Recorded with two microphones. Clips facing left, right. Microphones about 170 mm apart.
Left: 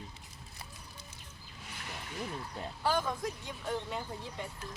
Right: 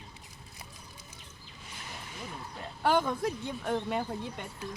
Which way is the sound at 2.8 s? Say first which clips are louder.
Right 5 dB; 65° right (ahead or behind).